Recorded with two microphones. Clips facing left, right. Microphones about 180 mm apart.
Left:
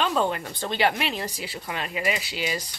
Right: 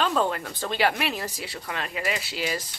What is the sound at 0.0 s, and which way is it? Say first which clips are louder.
Speech: even; 5° left (ahead or behind).